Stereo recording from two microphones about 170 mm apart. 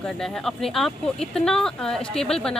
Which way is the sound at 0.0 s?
5° left (ahead or behind).